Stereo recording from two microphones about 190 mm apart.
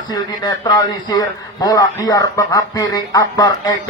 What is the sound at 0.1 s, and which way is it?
A man's voice, 20° left (ahead or behind).